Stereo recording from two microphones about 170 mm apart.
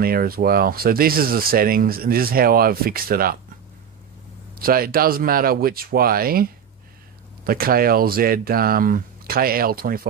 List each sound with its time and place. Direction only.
0.0 s speech: 60° right (ahead or behind)
4.6 s speech: 60° right (ahead or behind)